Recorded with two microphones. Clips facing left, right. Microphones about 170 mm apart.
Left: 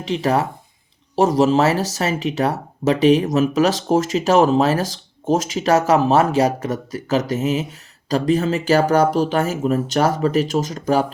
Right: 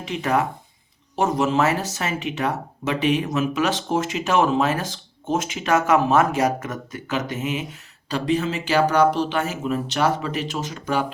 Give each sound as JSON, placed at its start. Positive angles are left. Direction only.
{"t": 0.0, "sound": "speech", "side_deg": 30}